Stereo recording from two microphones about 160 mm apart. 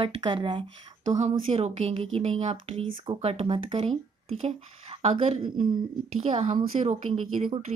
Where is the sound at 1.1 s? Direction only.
45° right (ahead or behind).